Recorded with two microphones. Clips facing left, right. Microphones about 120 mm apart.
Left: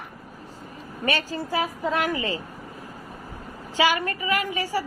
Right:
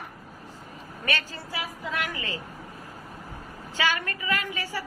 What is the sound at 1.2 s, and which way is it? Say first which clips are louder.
Speech: left 9 dB; 40° left (ahead or behind).